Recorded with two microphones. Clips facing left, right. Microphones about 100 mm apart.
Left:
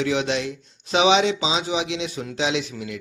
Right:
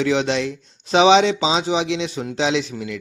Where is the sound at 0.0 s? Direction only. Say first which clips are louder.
Right 3 dB; 30° right (ahead or behind).